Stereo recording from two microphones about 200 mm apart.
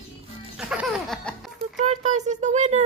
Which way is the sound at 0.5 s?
5° right (ahead or behind).